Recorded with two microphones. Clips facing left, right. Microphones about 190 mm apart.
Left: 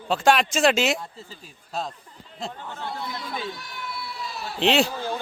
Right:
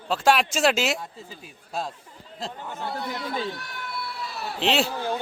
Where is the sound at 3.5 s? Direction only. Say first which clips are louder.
Right 1 dB; 60° right (ahead or behind).